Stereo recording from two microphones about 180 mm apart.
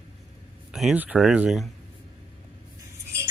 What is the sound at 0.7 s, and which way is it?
Speech, centre (ahead or behind).